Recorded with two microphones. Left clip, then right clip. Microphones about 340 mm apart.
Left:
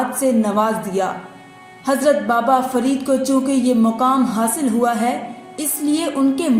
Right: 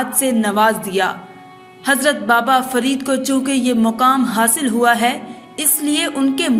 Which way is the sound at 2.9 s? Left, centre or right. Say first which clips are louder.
Left 1 dB; right.